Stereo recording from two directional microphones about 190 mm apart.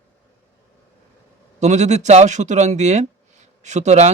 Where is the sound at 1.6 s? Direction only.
35° right (ahead or behind).